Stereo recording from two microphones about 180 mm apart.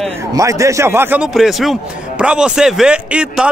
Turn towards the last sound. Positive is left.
turn(degrees=-5)  # may be behind; listen again after turning